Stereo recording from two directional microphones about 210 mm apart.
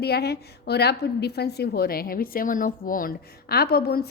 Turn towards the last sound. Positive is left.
turn(degrees=50)  # may be behind; listen again after turning